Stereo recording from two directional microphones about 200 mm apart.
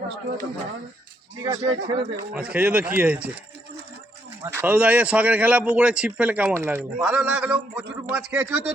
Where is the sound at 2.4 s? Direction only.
5° right (ahead or behind).